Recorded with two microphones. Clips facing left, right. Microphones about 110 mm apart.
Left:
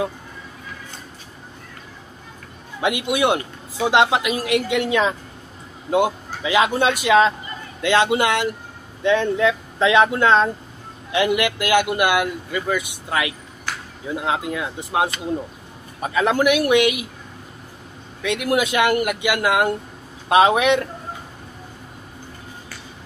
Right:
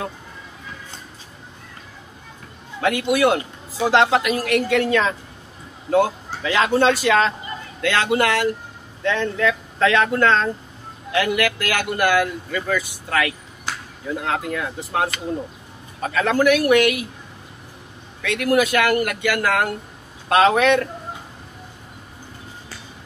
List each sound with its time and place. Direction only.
2.8 s a man's voice: 15° left (ahead or behind)
18.2 s speech: 20° left (ahead or behind)